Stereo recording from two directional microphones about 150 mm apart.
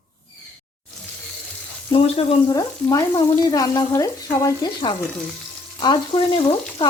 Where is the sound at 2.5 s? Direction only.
25° left (ahead or behind); by 6.9 s 40° left (ahead or behind).